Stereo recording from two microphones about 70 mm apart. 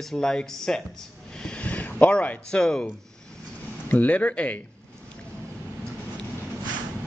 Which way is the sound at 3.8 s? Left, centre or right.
Left.